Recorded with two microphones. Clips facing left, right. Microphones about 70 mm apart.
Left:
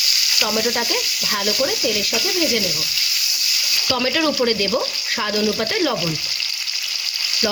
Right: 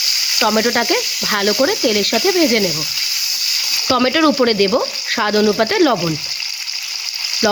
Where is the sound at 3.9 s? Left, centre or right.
Right.